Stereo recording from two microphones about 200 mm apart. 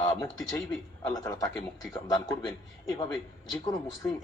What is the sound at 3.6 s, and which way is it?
Speech, 20° left (ahead or behind).